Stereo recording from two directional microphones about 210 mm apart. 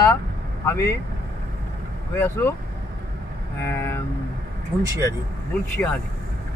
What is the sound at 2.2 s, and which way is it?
Speech, 10° left (ahead or behind).